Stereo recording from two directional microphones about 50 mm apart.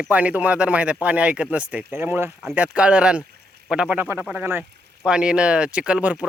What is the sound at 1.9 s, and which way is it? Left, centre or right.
Speech, right.